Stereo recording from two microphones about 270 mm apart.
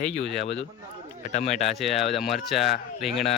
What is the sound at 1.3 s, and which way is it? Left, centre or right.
Speech, left.